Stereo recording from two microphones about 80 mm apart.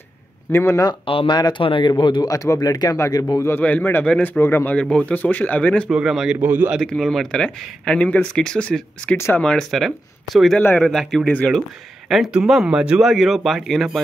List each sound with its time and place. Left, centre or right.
0.5 s speech: left
0.8 s speech: left
2.2 s speech: left
3.6 s speech: left
4.7 s speech: centre
5.9 s speech: centre
6.4 s speech: right
6.8 s speech: centre
9.1 s speech: left
9.4 s speech: centre
9.7 s speech: centre